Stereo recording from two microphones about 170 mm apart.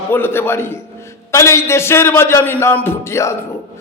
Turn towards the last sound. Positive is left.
turn(degrees=15)  # may be behind; listen again after turning